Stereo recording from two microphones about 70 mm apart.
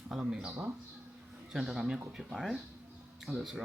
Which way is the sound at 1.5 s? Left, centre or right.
Centre.